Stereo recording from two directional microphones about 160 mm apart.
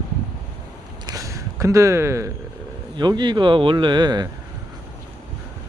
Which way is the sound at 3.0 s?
30° right (ahead or behind).